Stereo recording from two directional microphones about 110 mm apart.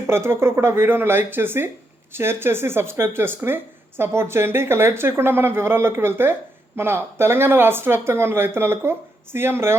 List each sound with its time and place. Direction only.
0.1 s speech: 25° right (ahead or behind)